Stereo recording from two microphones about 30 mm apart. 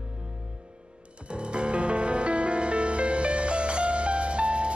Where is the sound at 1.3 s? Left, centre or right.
Right.